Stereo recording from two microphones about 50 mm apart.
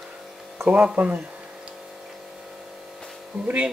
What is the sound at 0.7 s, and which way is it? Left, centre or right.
Speech, right.